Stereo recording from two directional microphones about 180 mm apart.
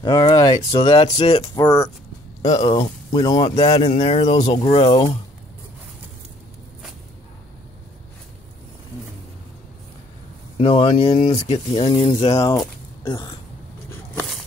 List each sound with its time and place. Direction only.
0.0 s speech: 25° left (ahead or behind)
1.4 s speech: 20° left (ahead or behind)
10.6 s speech: 30° left (ahead or behind)
12.5 s a sound: 25° left (ahead or behind)